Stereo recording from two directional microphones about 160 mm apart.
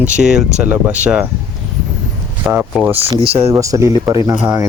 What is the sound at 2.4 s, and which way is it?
Speech, 10° right (ahead or behind).